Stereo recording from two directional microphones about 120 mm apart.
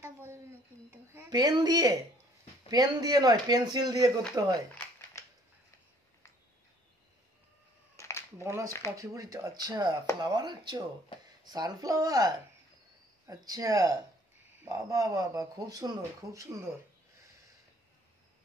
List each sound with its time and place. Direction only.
0.0 s a sound: 20° right (ahead or behind)
1.3 s a man's voice: 35° right (ahead or behind)
7.9 s cat: 25° left (ahead or behind)
8.9 s a man's voice: 30° right (ahead or behind)